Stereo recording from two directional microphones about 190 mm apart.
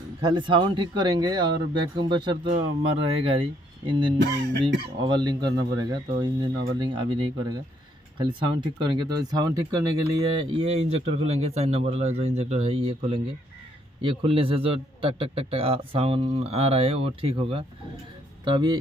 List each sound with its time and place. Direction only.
0.2 s speech: 25° right (ahead or behind)
4.2 s speech: 65° right (ahead or behind)
5.0 s speech: 25° right (ahead or behind)